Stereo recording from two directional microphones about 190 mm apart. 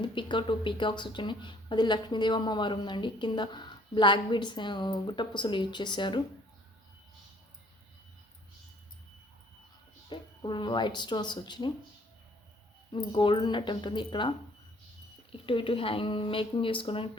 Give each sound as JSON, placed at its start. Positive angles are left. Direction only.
{"t": 0.0, "sound": "speech", "side_deg": 25}
{"t": 10.1, "sound": "speech", "side_deg": 25}
{"t": 13.1, "sound": "speech", "side_deg": 25}